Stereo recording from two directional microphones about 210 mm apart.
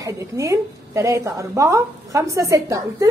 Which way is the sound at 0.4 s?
15° right (ahead or behind).